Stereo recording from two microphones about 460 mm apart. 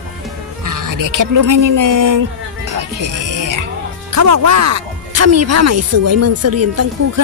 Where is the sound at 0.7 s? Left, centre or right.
Right.